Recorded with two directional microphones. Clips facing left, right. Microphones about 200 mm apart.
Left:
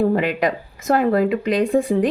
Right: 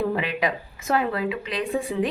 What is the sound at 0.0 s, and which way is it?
Speech, 40° left (ahead or behind).